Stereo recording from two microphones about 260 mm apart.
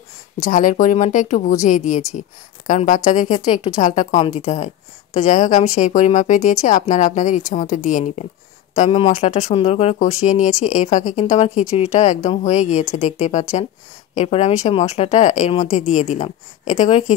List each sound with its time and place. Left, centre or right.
0.4 s speech: left